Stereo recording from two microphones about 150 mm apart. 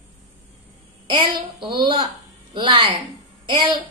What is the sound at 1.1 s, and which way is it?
A child's voice, 35° right (ahead or behind).